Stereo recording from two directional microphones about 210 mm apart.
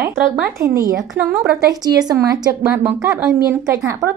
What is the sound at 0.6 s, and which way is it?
Speech, 15° right (ahead or behind).